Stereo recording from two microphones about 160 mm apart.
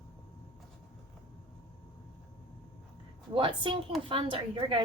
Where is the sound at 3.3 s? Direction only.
30° right (ahead or behind).